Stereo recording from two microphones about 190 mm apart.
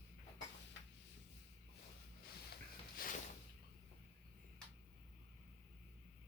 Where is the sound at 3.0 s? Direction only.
50° left (ahead or behind).